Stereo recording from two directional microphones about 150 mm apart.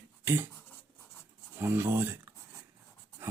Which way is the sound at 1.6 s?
15° right (ahead or behind).